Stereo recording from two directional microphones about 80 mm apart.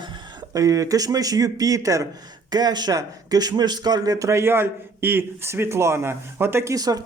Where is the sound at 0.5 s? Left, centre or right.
Right.